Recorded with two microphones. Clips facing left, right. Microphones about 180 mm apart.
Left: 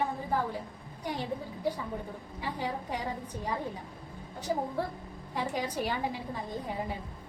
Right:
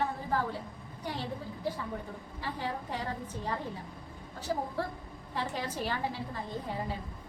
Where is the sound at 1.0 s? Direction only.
15° left (ahead or behind).